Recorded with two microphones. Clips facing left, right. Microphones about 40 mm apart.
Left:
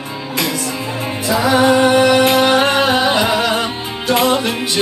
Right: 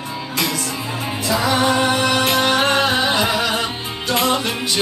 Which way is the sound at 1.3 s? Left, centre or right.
Centre.